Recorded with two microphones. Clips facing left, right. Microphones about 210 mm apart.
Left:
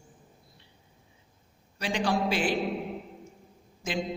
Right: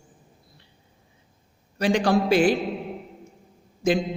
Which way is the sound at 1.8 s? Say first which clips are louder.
Right 7 dB; 40° right (ahead or behind).